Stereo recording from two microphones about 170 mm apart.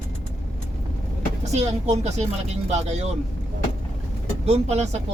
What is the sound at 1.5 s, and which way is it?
Speech, 40° right (ahead or behind).